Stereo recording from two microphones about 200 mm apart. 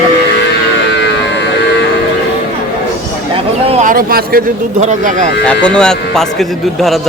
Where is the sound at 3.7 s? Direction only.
40° right (ahead or behind).